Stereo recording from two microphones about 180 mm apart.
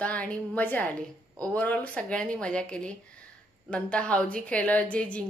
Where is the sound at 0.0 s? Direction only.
10° left (ahead or behind).